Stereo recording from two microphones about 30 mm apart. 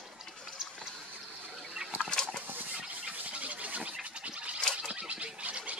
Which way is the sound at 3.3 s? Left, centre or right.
Right.